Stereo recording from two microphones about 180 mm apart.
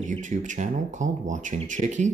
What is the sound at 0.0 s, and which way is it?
Speech, 45° right (ahead or behind).